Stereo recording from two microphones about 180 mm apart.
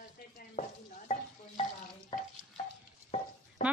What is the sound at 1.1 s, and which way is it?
Stir, 45° left (ahead or behind).